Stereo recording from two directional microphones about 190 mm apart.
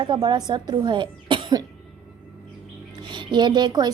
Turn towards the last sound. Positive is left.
turn(degrees=-25)  # may be behind; listen again after turning